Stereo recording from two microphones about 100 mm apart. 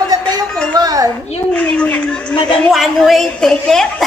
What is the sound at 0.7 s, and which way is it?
Speech, 40° right (ahead or behind).